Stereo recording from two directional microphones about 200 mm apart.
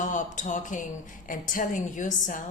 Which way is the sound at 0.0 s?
40° left (ahead or behind).